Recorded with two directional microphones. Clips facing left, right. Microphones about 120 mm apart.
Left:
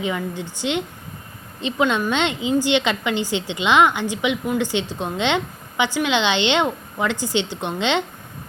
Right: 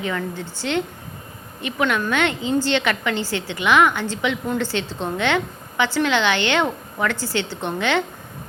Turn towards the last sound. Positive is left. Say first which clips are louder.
# even
turn(degrees=20)  # may be behind; listen again after turning